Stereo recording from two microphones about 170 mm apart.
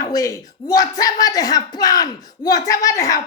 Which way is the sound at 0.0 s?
20° left (ahead or behind).